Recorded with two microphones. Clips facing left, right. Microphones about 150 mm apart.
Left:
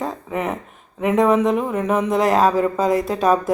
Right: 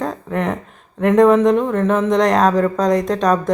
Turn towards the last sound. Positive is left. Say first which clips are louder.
# right 2 dB
turn(degrees=5)  # may be behind; listen again after turning